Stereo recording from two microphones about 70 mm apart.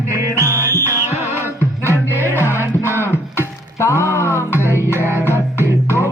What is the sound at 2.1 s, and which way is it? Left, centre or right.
Music, left.